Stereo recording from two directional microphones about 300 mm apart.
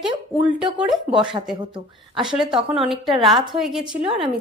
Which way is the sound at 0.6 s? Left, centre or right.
Centre.